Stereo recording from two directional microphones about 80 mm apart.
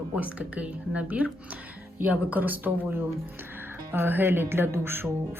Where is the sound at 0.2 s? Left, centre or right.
Centre.